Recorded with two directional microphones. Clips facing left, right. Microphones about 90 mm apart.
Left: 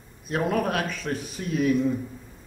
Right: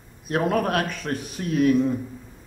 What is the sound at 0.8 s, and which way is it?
Speech, centre (ahead or behind).